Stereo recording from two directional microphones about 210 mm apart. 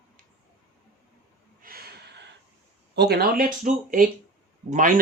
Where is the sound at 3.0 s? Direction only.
50° right (ahead or behind).